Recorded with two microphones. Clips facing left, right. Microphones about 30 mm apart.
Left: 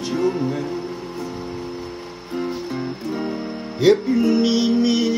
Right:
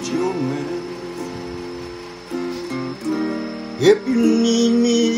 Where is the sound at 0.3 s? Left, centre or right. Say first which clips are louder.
Even; right.